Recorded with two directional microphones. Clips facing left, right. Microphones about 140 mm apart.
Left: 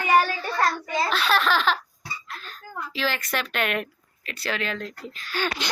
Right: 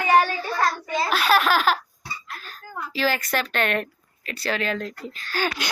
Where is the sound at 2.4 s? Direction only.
5° right (ahead or behind).